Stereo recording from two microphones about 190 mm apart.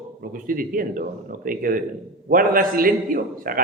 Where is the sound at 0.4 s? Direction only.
45° right (ahead or behind).